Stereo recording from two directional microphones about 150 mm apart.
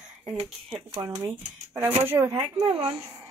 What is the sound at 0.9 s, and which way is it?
Speech, 20° right (ahead or behind).